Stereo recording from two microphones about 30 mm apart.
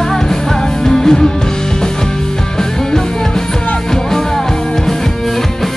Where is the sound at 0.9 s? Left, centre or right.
Centre.